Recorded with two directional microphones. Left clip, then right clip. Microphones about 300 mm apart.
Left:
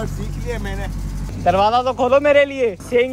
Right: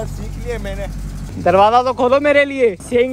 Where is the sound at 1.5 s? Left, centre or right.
Centre.